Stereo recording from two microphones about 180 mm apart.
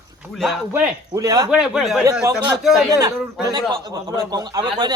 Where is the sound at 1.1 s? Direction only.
20° right (ahead or behind).